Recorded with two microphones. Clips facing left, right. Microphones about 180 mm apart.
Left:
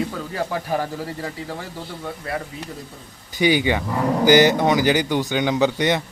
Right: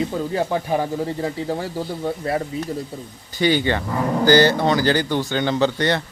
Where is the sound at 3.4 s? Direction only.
15° left (ahead or behind).